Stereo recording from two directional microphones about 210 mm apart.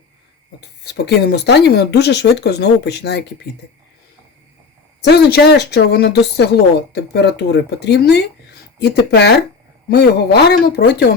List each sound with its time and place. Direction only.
0.9 s a woman's voice: 50° left (ahead or behind)
5.0 s a woman's voice: 50° left (ahead or behind)